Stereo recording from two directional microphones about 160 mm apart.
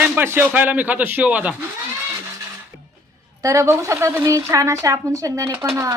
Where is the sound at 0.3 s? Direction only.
10° right (ahead or behind).